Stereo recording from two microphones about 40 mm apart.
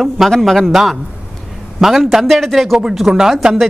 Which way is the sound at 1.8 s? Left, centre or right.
Centre.